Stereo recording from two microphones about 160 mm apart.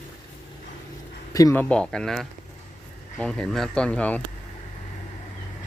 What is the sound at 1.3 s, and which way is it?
Speech, 20° left (ahead or behind).